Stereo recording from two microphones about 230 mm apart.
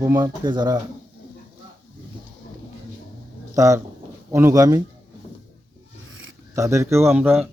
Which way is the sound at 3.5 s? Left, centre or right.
Centre.